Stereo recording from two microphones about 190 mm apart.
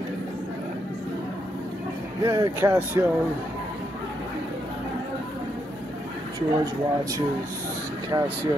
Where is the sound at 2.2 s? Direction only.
15° right (ahead or behind).